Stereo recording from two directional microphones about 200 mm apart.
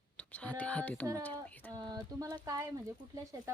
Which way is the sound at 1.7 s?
20° right (ahead or behind).